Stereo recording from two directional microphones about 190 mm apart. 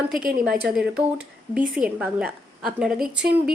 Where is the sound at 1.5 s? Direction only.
5° right (ahead or behind).